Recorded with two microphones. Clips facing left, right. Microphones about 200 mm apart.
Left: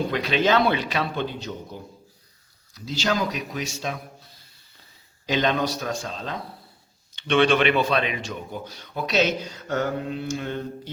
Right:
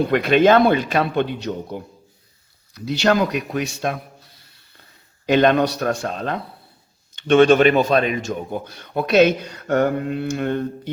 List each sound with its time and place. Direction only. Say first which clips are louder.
0.1 s a man's voice: right 9 dB; 55° right (ahead or behind)
5.2 s a man's voice: right 8 dB; 60° right (ahead or behind)
7.2 s a man's voice: right 7 dB; 45° right (ahead or behind)